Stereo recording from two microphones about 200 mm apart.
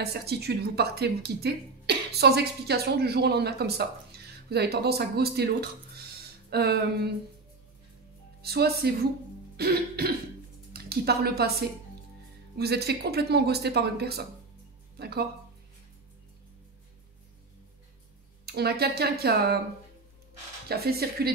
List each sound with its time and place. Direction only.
0.0 s speech: 55° right (ahead or behind)
8.4 s a woman's voice: 50° right (ahead or behind)
12.5 s speech: 55° right (ahead or behind)
18.4 s speech: 50° right (ahead or behind)
20.6 s speech: 50° right (ahead or behind)